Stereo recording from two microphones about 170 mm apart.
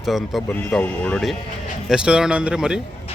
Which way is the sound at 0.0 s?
Centre (ahead or behind).